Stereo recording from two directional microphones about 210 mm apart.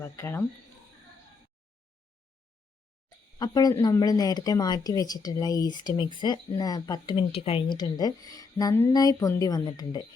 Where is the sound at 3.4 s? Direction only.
20° left (ahead or behind).